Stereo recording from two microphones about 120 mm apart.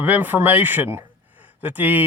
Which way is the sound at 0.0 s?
15° right (ahead or behind).